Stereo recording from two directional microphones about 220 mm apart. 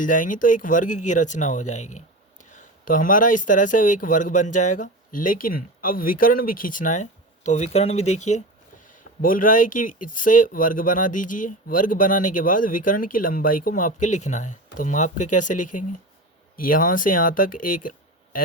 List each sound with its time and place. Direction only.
0.0 s speech: 35° left (ahead or behind)